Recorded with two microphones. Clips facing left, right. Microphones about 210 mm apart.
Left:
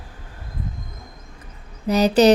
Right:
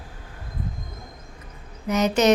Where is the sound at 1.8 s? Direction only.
35° left (ahead or behind).